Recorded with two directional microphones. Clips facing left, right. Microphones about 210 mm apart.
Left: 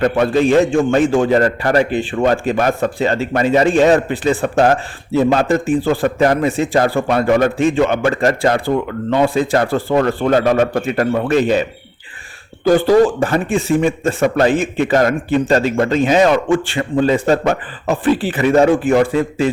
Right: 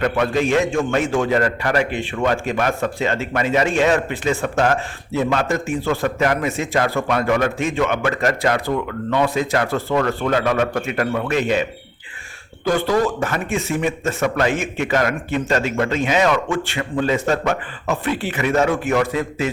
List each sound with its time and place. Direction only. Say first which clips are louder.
0.0 s a man's voice: left 5 dB; 35° left (ahead or behind)
12.6 s a man's voice: left 7 dB; 30° left (ahead or behind)